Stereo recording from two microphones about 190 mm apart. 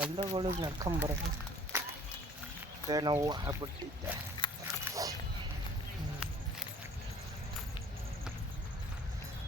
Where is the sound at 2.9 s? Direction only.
20° right (ahead or behind).